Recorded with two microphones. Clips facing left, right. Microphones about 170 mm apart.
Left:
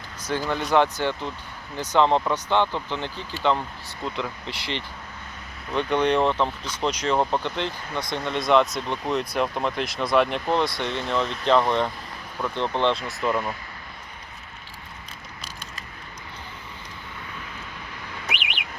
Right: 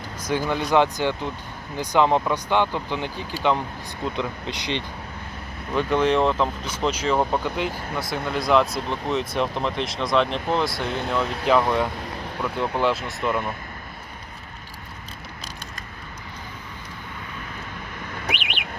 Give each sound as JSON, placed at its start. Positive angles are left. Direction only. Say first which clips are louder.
{"t": 0.3, "sound": "speech", "louder": "right 2 dB", "side_deg": -15}
{"t": 5.7, "sound": "speech", "louder": "right 1 dB", "side_deg": -5}